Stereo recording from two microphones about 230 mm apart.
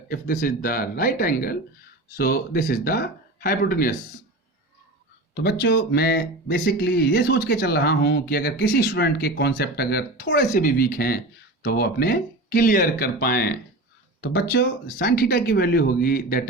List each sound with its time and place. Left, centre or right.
0.1 s speech: left
5.3 s speech: left